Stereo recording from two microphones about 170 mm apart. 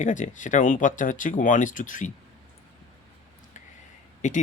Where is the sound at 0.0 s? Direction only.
45° left (ahead or behind).